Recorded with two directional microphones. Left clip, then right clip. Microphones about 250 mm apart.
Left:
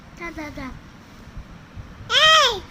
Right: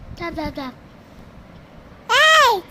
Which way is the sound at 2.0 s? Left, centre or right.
Centre.